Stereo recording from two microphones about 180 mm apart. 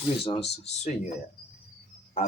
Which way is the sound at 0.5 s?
35° left (ahead or behind).